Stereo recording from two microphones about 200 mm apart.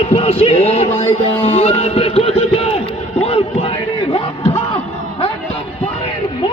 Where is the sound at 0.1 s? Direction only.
30° left (ahead or behind).